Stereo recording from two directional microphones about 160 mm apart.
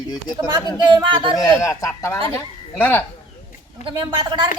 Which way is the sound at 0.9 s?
30° right (ahead or behind).